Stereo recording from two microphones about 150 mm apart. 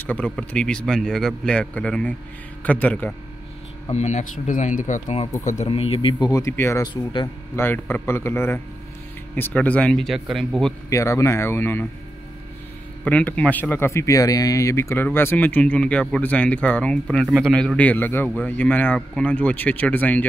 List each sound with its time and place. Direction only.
0.0 s speech: 10° left (ahead or behind)
3.9 s speech: 50° left (ahead or behind)
5.7 s speech: 40° left (ahead or behind); by 6.8 s 15° left (ahead or behind)
6.8 s speech: 30° left (ahead or behind)
7.5 s speech: 15° left (ahead or behind)
10.9 s speech: 20° left (ahead or behind)
13.0 s speech: 10° left (ahead or behind)